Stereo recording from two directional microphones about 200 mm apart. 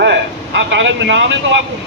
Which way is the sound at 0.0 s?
60° right (ahead or behind).